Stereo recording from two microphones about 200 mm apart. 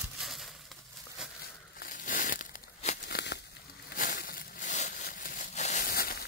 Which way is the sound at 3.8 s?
40° left (ahead or behind).